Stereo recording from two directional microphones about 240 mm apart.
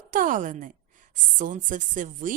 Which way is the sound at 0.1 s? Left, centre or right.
Right.